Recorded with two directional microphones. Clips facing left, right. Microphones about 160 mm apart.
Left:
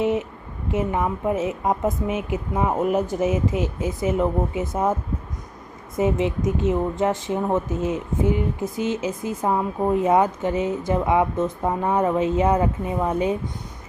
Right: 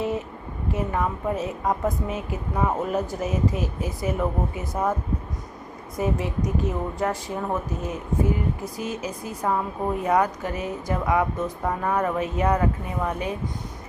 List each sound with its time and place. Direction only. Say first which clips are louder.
0.0 s a sound: left 5 dB; 20° left (ahead or behind)
0.7 s a woman's voice: left 3 dB; 20° left (ahead or behind)
6.0 s a woman's voice: left 4 dB; 20° left (ahead or behind)